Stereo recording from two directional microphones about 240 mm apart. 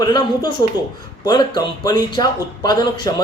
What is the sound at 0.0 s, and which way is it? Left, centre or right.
Speech, centre.